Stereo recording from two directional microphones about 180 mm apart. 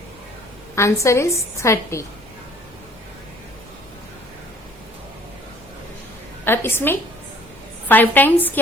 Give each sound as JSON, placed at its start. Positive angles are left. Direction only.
{"t": 0.8, "sound": "a woman's voice", "side_deg": 15}
{"t": 6.4, "sound": "a woman's voice", "side_deg": 10}